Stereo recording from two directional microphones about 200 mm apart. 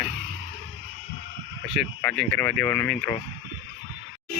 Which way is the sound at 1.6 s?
5° left (ahead or behind).